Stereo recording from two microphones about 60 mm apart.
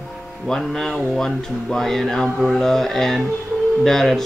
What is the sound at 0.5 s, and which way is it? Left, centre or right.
Speech, centre.